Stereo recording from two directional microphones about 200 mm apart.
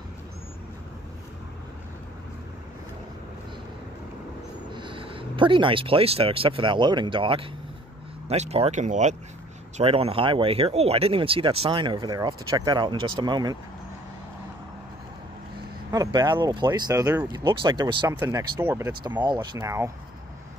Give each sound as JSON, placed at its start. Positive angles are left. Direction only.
{"t": 4.7, "sound": "speech", "side_deg": -25}
{"t": 15.9, "sound": "speech", "side_deg": -20}
{"t": 18.2, "sound": "speech", "side_deg": -10}